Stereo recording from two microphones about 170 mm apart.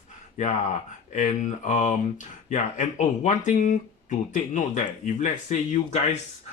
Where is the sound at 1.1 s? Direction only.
45° left (ahead or behind).